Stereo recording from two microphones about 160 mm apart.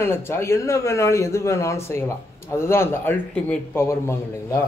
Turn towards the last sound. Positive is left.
turn(degrees=15)  # may be behind; listen again after turning